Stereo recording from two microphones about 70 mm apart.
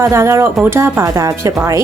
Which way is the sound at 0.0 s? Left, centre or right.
Right.